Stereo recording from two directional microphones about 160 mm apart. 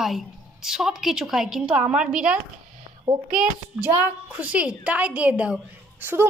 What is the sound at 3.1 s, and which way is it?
Speech, 25° right (ahead or behind).